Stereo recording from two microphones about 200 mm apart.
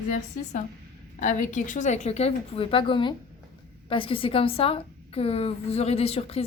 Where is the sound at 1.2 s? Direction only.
40° left (ahead or behind).